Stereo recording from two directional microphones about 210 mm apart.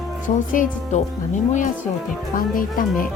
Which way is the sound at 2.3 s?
40° left (ahead or behind).